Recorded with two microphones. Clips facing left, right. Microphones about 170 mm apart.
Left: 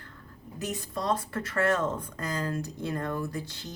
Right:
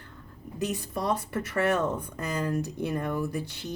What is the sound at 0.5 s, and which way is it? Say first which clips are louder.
Speech: right 3 dB; 15° right (ahead or behind).